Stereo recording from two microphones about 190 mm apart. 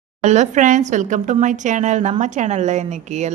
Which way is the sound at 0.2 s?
40° right (ahead or behind).